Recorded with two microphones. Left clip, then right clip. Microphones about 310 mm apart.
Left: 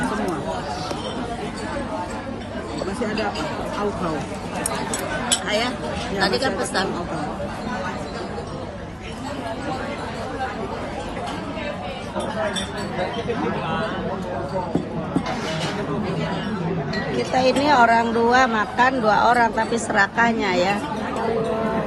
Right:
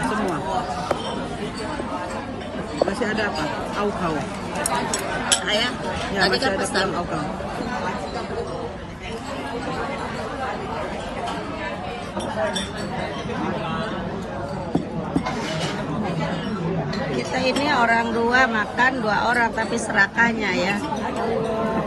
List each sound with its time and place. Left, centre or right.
5.5 s speech: centre
17.2 s speech: centre